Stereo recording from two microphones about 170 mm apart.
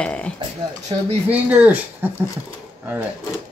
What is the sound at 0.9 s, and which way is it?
Speech, 40° right (ahead or behind).